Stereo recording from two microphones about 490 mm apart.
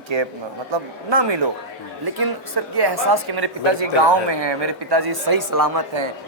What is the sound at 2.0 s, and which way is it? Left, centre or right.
A woman's voice, right.